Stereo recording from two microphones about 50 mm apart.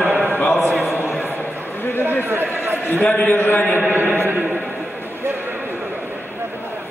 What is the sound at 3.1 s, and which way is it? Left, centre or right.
Speech, left.